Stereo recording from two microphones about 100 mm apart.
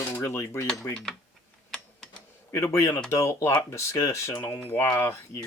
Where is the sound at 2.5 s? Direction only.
30° left (ahead or behind).